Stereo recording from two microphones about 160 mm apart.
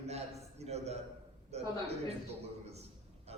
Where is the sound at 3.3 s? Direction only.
40° right (ahead or behind).